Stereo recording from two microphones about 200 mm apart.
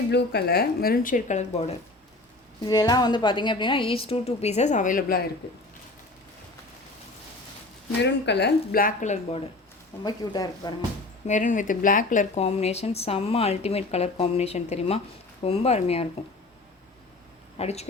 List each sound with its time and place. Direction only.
0.1 s speech: 55° left (ahead or behind); by 1.7 s 35° left (ahead or behind)
2.6 s a woman's voice: 20° left (ahead or behind); by 5.2 s 45° left (ahead or behind)
8.0 s speech: 60° left (ahead or behind); by 9.4 s 35° left (ahead or behind)
10.0 s a woman's voice: 20° left (ahead or behind)
11.3 s speech: 40° left (ahead or behind)
17.6 s speech: 30° left (ahead or behind)